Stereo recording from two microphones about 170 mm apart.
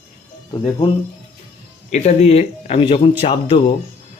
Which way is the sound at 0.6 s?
30° left (ahead or behind).